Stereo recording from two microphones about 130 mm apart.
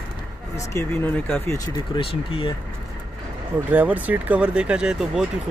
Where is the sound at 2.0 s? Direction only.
45° left (ahead or behind).